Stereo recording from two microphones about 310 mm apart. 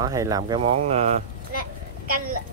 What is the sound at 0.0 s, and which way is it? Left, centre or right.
Speech, centre.